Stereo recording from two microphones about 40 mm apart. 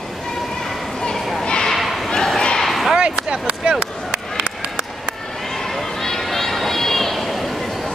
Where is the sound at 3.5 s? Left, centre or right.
Right.